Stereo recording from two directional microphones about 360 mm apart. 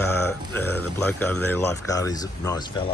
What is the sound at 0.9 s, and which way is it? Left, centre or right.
Speech, centre.